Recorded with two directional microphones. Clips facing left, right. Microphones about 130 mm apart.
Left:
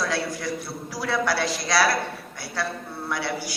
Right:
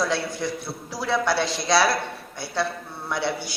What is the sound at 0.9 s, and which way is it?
Speech, 25° right (ahead or behind).